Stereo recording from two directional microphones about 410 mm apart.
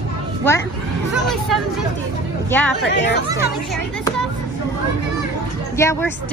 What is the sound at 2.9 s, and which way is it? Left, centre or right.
Speech, left.